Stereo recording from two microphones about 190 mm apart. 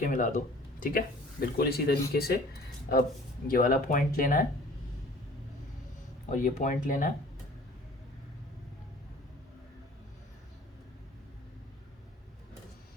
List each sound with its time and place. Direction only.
0.0 s speech: 45° left (ahead or behind)
6.3 s speech: 45° left (ahead or behind)